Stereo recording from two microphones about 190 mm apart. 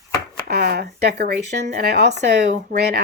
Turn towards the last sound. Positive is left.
turn(degrees=-60)  # may be behind; listen again after turning